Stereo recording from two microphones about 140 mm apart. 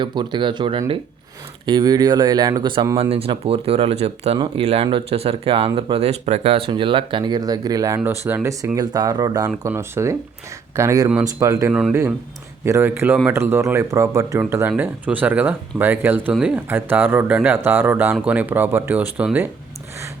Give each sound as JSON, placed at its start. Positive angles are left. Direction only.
{"t": 0.0, "sound": "speech", "side_deg": -35}
{"t": 3.0, "sound": "speech", "side_deg": -45}
{"t": 11.7, "sound": "speech", "side_deg": -5}
{"t": 12.6, "sound": "speech", "side_deg": -20}